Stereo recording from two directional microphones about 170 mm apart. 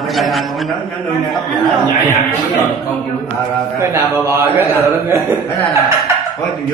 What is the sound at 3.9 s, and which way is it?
Speech, 15° right (ahead or behind).